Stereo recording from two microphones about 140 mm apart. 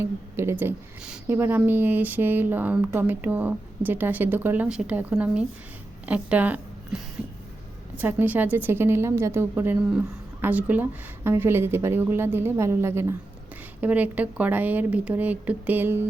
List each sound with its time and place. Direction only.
0.0 s a woman's voice: 20° right (ahead or behind)